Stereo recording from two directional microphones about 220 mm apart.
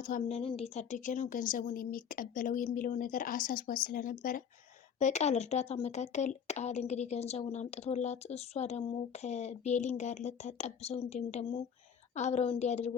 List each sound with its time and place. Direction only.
0.0 s speech: 35° left (ahead or behind)